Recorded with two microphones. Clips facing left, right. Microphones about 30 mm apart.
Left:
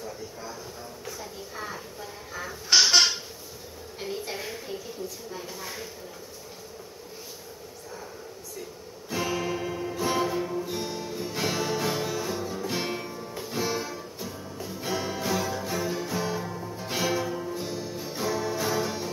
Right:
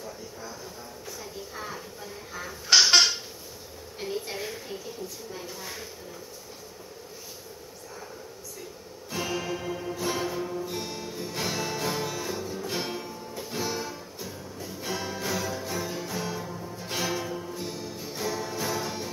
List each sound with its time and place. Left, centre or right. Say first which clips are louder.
1.5 s a sound: left 2 dB; centre
4.0 s a sound: right 1 dB; centre
5.3 s speech: left 1 dB; centre
9.1 s music: left 2 dB; centre
16.4 s music: left 2 dB; centre
16.8 s music: left 3 dB; centre